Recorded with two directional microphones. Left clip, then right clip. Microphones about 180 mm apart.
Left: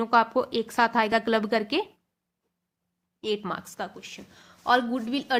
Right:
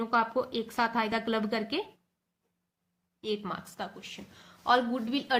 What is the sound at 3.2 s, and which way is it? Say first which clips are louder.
A woman's voice: left 5 dB; 50° left (ahead or behind).